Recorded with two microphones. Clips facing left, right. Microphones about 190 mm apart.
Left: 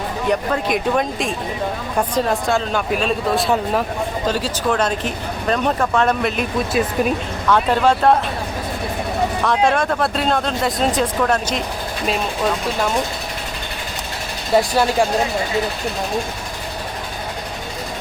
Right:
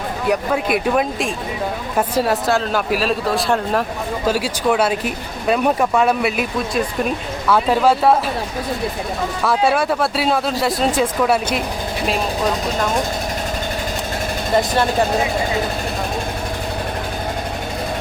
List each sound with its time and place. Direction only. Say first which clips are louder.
0.3 s speech: right 1 dB; 5° right (ahead or behind)
4.3 s speech: right 4 dB; 10° right (ahead or behind)
9.4 s speech: right 2 dB; 5° right (ahead or behind)
14.5 s speech: left 2 dB; 10° left (ahead or behind)